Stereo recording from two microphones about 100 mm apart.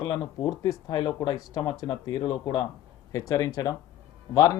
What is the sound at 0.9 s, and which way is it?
Speech, 40° left (ahead or behind).